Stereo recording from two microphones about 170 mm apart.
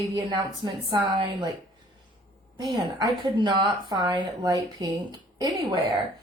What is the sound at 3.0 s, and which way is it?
A woman's voice, 25° right (ahead or behind).